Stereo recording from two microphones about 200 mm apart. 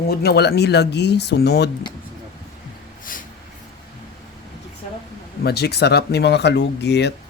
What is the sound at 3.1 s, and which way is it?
Snort, 45° left (ahead or behind).